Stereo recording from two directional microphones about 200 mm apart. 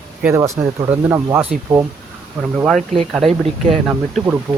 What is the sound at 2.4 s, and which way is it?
Speech, centre (ahead or behind).